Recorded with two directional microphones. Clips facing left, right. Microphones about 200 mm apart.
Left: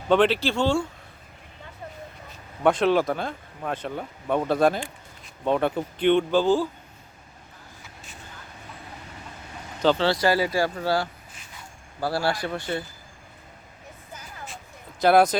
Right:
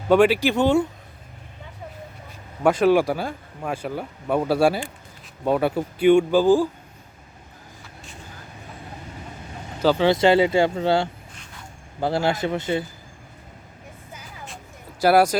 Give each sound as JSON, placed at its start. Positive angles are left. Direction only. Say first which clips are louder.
{"t": 0.1, "sound": "speech", "louder": "right 4 dB", "side_deg": -10}
{"t": 2.6, "sound": "speech", "louder": "right 3 dB", "side_deg": -5}
{"t": 9.8, "sound": "speech", "louder": "right 2 dB", "side_deg": -10}
{"t": 10.1, "sound": "speech", "louder": "right 6 dB", "side_deg": -25}
{"t": 15.0, "sound": "speech", "louder": "right 1 dB", "side_deg": -10}